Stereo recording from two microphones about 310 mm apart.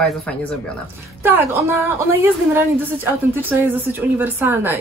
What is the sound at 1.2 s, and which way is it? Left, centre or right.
Speech, centre.